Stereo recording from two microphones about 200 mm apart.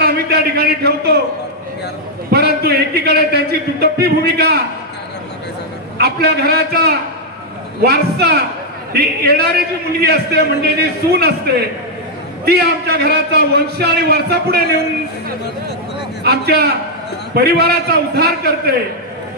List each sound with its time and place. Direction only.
0.0 s a sound: 55° right (ahead or behind)
2.3 s a man's voice: 50° right (ahead or behind)
5.9 s a man's voice: 50° right (ahead or behind)
16.3 s a man's voice: 50° right (ahead or behind)